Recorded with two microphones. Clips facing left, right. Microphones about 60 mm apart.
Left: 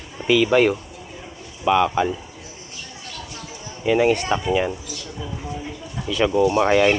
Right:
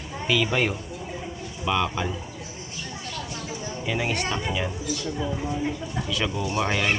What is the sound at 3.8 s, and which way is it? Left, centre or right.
Speech, centre.